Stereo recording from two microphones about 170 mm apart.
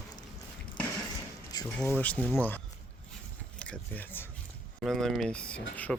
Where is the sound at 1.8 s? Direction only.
10° left (ahead or behind).